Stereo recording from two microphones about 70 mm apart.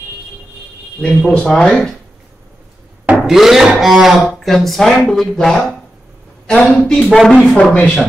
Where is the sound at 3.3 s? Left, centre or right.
Centre.